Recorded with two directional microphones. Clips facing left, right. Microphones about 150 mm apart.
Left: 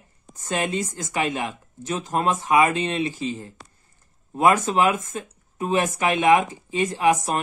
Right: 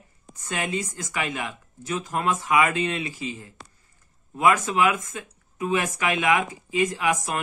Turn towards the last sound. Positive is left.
turn(degrees=30)  # may be behind; listen again after turning